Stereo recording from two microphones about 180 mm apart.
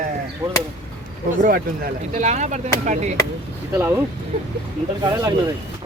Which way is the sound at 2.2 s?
40° right (ahead or behind).